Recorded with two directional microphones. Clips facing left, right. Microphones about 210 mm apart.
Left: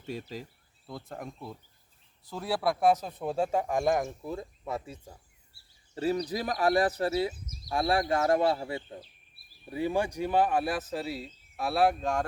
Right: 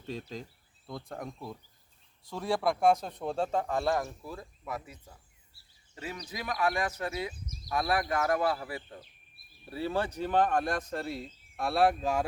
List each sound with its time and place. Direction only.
0.0 s speech: 5° left (ahead or behind); by 9.0 s 25° left (ahead or behind)
9.6 s speech: 15° left (ahead or behind); by 12.2 s centre (ahead or behind)